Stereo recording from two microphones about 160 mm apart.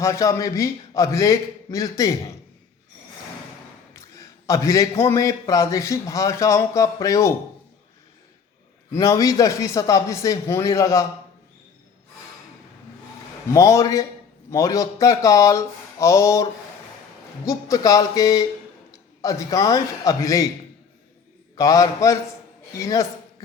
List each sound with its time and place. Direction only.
0.0 s a man's voice: 20° left (ahead or behind)
3.9 s a man's voice: 20° left (ahead or behind)
8.9 s a man's voice: 20° left (ahead or behind)
13.5 s a man's voice: 20° left (ahead or behind)
21.5 s a man's voice: 20° left (ahead or behind)